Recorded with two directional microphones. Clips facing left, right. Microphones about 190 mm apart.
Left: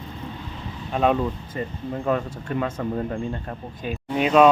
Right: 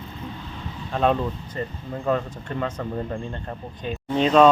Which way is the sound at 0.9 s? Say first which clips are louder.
Left 1 dB; 10° left (ahead or behind).